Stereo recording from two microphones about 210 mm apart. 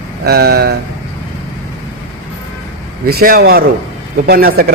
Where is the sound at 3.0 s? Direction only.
45° right (ahead or behind).